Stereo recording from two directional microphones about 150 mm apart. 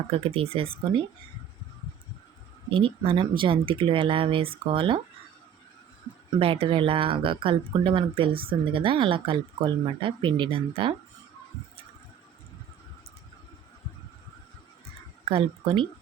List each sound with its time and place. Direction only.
0.1 s speech: 40° right (ahead or behind)
2.6 s speech: 35° right (ahead or behind)
6.4 s speech: 35° right (ahead or behind)
15.2 s a woman's voice: 40° right (ahead or behind)